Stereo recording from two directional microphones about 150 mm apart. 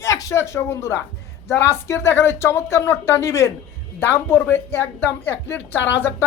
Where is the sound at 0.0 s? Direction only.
20° left (ahead or behind).